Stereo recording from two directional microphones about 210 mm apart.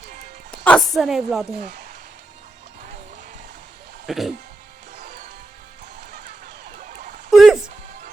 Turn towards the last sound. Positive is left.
turn(degrees=0)  # may be behind; listen again after turning